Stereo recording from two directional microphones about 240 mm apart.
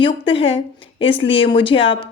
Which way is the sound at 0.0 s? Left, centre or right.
Left.